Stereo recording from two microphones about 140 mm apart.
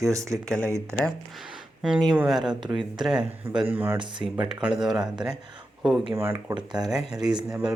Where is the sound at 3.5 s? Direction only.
15° right (ahead or behind).